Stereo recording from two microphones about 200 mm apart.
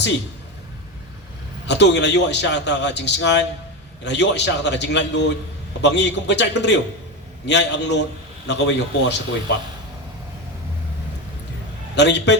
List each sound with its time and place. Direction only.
1.6 s a man's voice: 60° left (ahead or behind)
11.9 s a man's voice: 60° left (ahead or behind)